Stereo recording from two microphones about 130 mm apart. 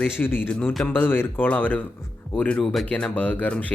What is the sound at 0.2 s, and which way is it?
Speech, 15° left (ahead or behind).